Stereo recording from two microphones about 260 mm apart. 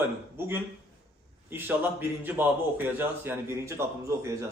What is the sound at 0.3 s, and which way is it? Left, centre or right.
Speech, centre.